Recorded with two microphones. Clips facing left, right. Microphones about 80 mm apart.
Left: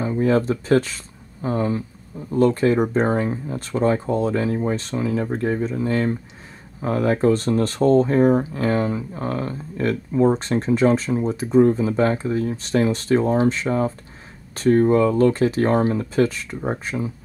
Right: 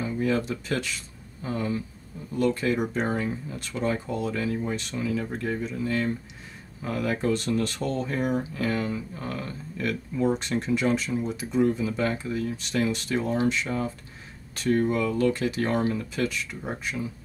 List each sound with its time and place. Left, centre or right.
0.0 s speech: left